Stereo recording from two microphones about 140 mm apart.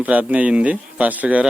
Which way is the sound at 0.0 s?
10° right (ahead or behind).